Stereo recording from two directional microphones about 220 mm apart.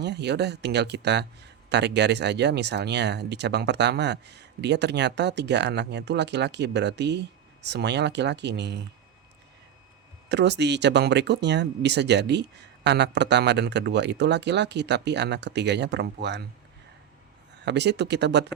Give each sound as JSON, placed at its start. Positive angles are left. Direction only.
{"t": 0.0, "sound": "speech", "side_deg": -50}
{"t": 10.2, "sound": "speech", "side_deg": -50}
{"t": 17.7, "sound": "speech", "side_deg": -50}